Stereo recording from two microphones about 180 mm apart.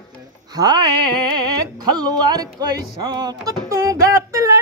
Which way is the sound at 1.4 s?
25° right (ahead or behind).